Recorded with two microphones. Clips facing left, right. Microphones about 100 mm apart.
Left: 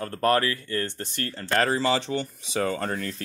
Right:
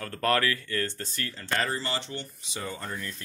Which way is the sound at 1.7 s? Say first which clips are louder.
Left 9 dB; 90° left.